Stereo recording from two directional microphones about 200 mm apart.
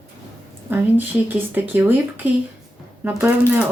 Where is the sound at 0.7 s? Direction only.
10° right (ahead or behind).